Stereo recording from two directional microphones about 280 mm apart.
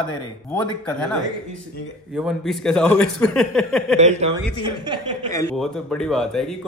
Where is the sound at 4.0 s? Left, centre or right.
Right.